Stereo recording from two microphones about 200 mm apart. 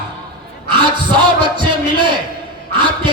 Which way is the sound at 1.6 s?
25° right (ahead or behind).